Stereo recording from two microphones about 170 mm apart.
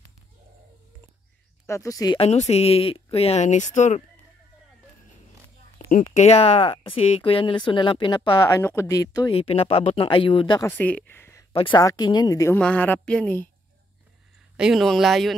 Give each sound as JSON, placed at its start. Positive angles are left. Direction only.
{"t": 1.7, "sound": "speech", "side_deg": 20}
{"t": 2.1, "sound": "speech", "side_deg": 40}
{"t": 5.9, "sound": "speech", "side_deg": 45}
{"t": 9.3, "sound": "speech", "side_deg": 35}
{"t": 10.6, "sound": "speech", "side_deg": 10}
{"t": 11.5, "sound": "a woman's voice", "side_deg": 30}
{"t": 12.5, "sound": "a woman's voice", "side_deg": 10}
{"t": 14.6, "sound": "speech", "side_deg": 0}